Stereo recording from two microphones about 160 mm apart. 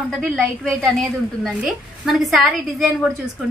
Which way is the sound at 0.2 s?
Centre (ahead or behind).